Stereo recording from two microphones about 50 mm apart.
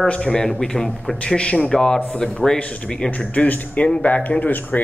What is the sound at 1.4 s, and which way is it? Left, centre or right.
Speech, left.